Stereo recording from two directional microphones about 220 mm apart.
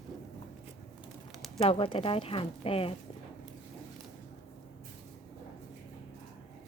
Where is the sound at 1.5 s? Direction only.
25° left (ahead or behind).